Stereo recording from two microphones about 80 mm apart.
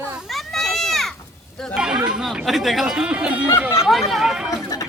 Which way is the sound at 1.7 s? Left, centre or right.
Centre.